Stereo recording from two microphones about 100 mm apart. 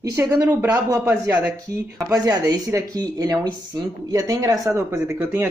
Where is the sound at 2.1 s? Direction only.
40° right (ahead or behind).